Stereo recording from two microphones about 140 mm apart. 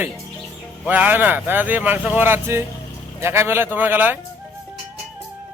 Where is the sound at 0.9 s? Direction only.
10° right (ahead or behind).